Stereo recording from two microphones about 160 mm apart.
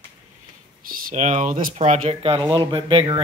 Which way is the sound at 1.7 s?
45° right (ahead or behind).